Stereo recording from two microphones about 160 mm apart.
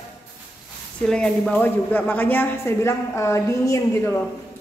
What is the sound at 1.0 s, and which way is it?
Speech, 5° left (ahead or behind).